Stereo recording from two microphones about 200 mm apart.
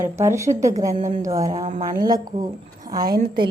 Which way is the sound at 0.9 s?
35° right (ahead or behind).